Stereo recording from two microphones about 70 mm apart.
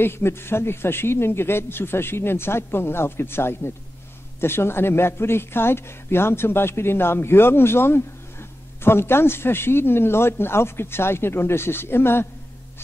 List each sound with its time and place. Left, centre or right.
0.0 s speech: left